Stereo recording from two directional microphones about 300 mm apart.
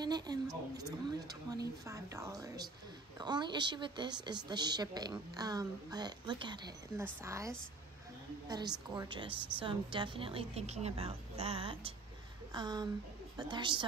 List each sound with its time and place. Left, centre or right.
0.0 s a woman's voice: centre